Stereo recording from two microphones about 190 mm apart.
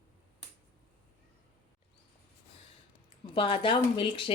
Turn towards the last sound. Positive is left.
turn(degrees=30)  # may be behind; listen again after turning